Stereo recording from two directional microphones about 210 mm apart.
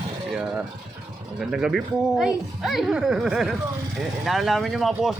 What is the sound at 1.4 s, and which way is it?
Speech, centre (ahead or behind).